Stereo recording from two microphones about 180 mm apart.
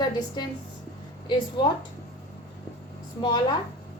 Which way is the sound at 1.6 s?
25° left (ahead or behind).